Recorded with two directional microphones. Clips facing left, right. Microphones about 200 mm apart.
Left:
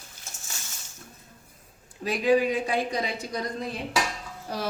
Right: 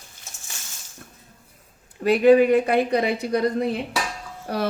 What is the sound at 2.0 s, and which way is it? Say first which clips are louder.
A woman's voice: right 8 dB; 60° right (ahead or behind).